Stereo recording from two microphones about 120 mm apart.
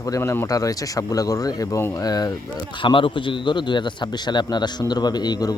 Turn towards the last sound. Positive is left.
turn(degrees=35)  # may be behind; listen again after turning